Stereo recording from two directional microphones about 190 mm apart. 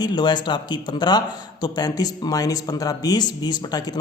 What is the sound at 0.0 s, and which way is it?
A man's voice, 20° left (ahead or behind).